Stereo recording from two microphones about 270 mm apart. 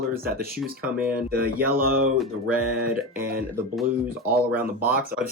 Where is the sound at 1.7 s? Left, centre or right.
Right.